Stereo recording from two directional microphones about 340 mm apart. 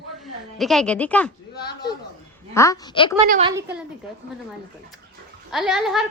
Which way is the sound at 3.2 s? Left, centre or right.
Right.